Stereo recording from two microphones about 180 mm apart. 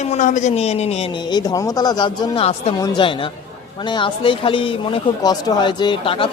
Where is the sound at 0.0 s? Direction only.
40° left (ahead or behind).